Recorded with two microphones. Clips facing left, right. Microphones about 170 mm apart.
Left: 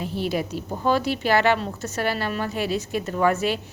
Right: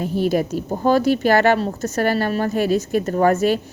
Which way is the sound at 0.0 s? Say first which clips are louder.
Right 7 dB; 45° right (ahead or behind).